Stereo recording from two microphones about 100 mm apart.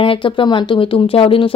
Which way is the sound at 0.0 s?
60° left (ahead or behind).